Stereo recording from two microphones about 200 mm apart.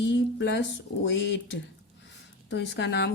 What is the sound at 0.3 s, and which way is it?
A woman's voice, 55° left (ahead or behind).